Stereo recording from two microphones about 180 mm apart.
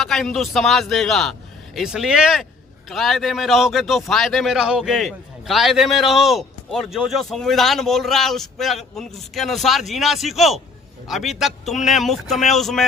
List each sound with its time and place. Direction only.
0.0 s a man's voice: centre (ahead or behind)